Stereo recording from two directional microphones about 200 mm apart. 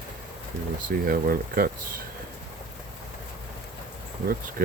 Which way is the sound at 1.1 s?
45° right (ahead or behind).